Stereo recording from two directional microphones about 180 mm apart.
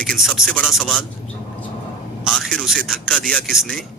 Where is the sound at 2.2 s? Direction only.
Centre (ahead or behind).